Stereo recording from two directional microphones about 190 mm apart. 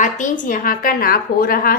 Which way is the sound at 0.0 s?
45° left (ahead or behind).